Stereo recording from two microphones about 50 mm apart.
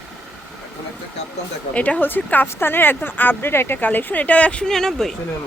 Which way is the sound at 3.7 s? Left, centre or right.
Left.